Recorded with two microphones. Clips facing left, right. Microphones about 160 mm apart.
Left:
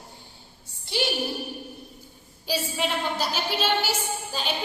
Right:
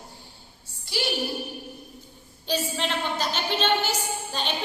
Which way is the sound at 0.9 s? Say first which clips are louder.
Left 3 dB; 20° left (ahead or behind).